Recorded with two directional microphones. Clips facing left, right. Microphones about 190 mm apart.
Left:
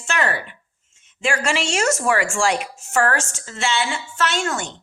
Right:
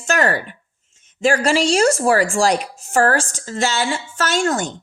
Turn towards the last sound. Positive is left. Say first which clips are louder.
# right 4 dB
turn(degrees=-40)  # may be behind; listen again after turning